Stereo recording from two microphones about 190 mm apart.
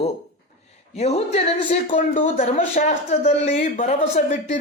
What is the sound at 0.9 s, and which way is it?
Speech, 35° left (ahead or behind).